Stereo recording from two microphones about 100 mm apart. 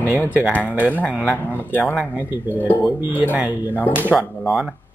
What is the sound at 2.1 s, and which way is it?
Speech, 20° right (ahead or behind).